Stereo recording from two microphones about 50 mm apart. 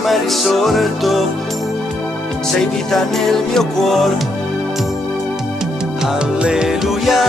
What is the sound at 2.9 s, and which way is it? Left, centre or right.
Music, centre.